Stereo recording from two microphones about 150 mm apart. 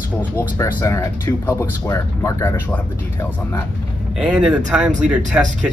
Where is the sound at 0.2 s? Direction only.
15° left (ahead or behind).